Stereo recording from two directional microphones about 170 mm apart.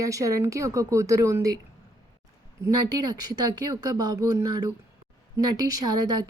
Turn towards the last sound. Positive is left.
turn(degrees=-20)  # may be behind; listen again after turning